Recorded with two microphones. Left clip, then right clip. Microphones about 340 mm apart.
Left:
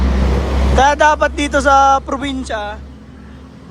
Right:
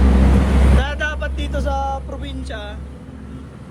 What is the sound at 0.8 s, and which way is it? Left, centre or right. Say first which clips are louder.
Speech: left 13 dB; centre.